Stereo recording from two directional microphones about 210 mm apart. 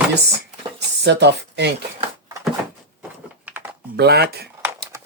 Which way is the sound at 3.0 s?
10° right (ahead or behind).